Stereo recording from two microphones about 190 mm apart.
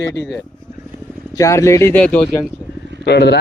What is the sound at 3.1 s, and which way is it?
Speech, 60° left (ahead or behind).